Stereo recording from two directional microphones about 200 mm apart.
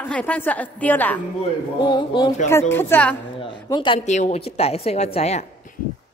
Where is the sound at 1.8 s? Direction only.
20° left (ahead or behind).